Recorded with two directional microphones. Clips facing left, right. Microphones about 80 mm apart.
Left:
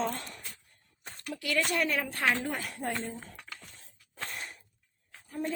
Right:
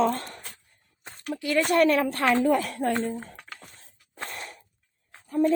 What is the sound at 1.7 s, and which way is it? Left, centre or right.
A woman's voice, right.